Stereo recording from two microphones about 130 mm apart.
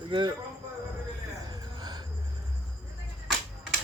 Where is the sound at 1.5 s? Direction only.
30° right (ahead or behind).